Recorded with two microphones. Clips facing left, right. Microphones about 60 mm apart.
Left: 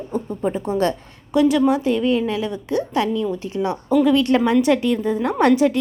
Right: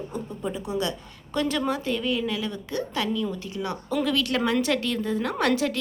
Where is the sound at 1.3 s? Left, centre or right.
Centre.